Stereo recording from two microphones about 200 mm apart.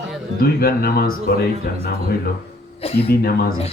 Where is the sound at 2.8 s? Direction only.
30° left (ahead or behind).